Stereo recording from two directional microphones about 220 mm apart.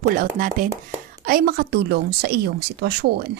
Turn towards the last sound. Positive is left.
turn(degrees=-50)  # may be behind; listen again after turning